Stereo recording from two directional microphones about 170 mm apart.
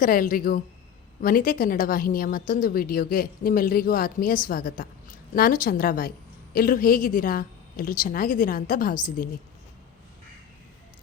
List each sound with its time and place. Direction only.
0.0 s a woman's voice: 55° left (ahead or behind)